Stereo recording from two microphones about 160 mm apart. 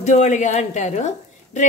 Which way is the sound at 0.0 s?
45° left (ahead or behind).